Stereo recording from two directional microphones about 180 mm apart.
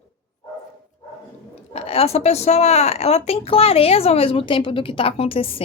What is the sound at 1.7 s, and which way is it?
A woman's voice, 35° left (ahead or behind).